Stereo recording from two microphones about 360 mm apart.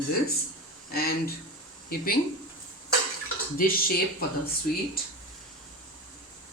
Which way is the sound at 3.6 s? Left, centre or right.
Left.